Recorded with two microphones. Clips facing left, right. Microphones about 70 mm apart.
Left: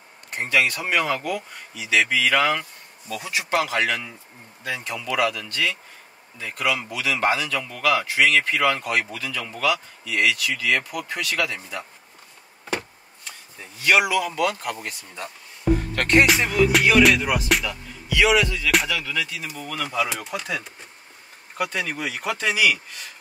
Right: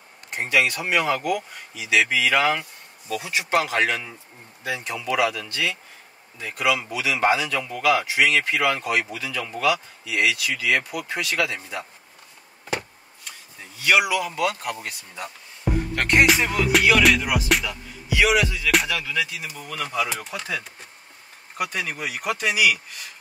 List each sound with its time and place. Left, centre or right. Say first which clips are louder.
0.4 s a man's voice: even; centre
3.5 s speech: right 1 dB; right
4.6 s a man's voice: right 1 dB; centre
14.1 s a man's voice: left 1 dB; centre
14.4 s speech: left 1 dB; centre
17.0 s music: left 1 dB; centre
18.0 s a man's voice: left 1 dB; centre
18.7 s music: even; centre
20.3 s speech: left 2 dB; centre
21.5 s a man's voice: left 1 dB; centre